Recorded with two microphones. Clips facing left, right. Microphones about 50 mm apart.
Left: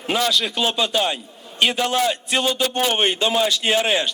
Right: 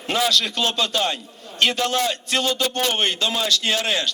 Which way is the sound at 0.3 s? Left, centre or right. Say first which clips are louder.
Left 1 dB; centre.